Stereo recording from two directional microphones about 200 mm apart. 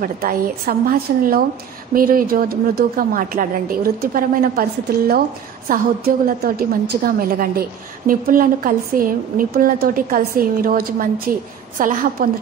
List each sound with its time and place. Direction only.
0.0 s a woman's voice: 45° right (ahead or behind)